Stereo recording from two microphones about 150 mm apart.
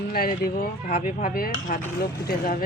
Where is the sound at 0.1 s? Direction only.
80° left.